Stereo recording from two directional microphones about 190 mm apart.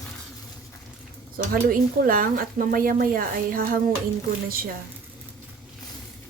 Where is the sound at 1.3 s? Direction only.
50° right (ahead or behind).